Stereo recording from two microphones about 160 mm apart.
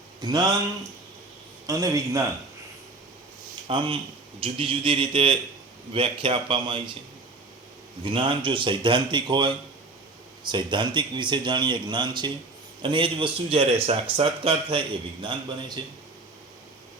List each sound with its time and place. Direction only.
0.2 s speech: 25° right (ahead or behind)
1.6 s speech: 20° right (ahead or behind)
3.7 s speech: 35° right (ahead or behind)
8.0 s speech: 30° right (ahead or behind)